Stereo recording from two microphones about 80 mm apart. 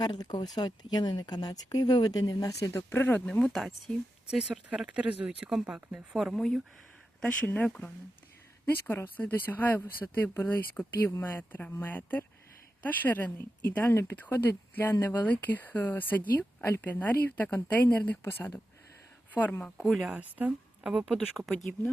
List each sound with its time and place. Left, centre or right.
0.0 s speech: left
2.9 s speech: left
3.4 s speech: centre
4.3 s speech: centre
7.4 s speech: left
8.9 s speech: left
19.7 s speech: centre
20.1 s speech: centre
20.9 s speech: centre